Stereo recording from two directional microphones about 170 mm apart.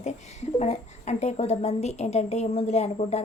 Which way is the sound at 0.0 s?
40° left (ahead or behind).